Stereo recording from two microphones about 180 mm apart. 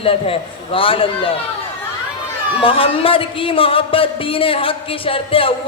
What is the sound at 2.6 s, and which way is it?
Speech, 30° left (ahead or behind).